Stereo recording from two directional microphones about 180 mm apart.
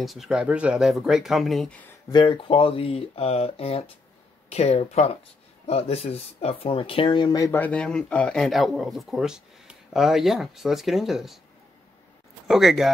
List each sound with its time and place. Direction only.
0.0 s speech: centre (ahead or behind)
2.0 s speech: 25° left (ahead or behind); by 11.3 s centre (ahead or behind)
12.4 s speech: centre (ahead or behind)